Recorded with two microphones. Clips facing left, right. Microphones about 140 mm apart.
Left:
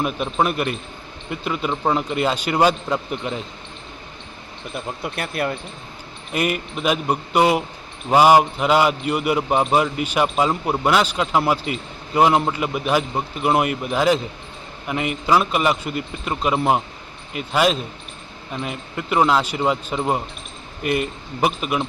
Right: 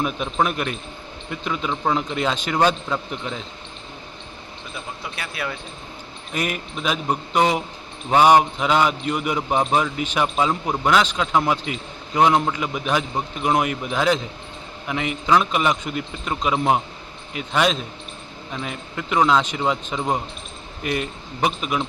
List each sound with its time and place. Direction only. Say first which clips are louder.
0.0 s speech: left 1 dB; 5° left (ahead or behind)
5.0 s speech: left 6 dB; 55° left (ahead or behind)
6.3 s a man's voice: left 4 dB; 5° left (ahead or behind)